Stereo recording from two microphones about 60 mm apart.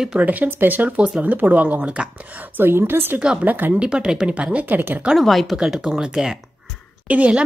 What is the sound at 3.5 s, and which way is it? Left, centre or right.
Speech, right.